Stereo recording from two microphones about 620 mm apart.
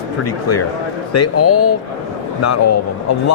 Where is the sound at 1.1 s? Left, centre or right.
Left.